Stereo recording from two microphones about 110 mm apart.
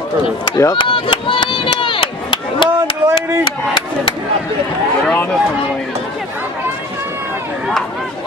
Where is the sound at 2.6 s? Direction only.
40° left (ahead or behind).